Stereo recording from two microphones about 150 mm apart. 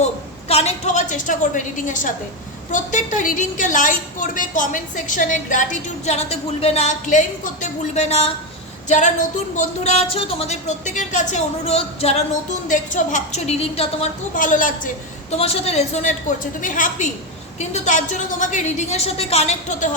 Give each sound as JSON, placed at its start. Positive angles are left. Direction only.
{"t": 0.0, "sound": "a sound", "side_deg": 45}
{"t": 2.7, "sound": "a woman's voice", "side_deg": 55}
{"t": 6.1, "sound": "a woman's voice", "side_deg": 45}
{"t": 12.6, "sound": "a woman's voice", "side_deg": 60}
{"t": 14.3, "sound": "a woman's voice", "side_deg": 60}
{"t": 15.3, "sound": "a woman's voice", "side_deg": 45}
{"t": 16.6, "sound": "a woman's voice", "side_deg": 60}